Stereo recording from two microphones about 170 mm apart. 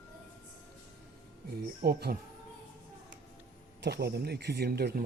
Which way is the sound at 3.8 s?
75° right (ahead or behind).